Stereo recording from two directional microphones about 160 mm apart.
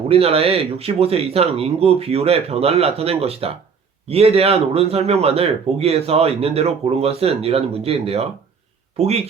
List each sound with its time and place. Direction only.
0.1 s speech: 40° right (ahead or behind)